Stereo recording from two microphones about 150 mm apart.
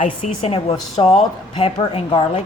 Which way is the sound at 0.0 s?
45° left (ahead or behind).